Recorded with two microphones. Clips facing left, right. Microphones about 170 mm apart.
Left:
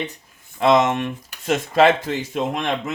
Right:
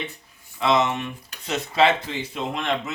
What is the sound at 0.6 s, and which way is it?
Speech, 45° left (ahead or behind).